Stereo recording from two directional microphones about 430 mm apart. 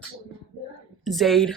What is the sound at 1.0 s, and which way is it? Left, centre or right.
Speech, centre.